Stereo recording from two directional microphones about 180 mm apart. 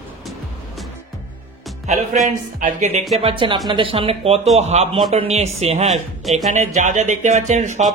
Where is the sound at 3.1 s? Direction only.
30° right (ahead or behind).